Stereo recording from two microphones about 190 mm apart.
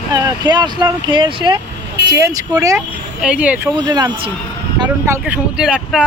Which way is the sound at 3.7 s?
20° right (ahead or behind).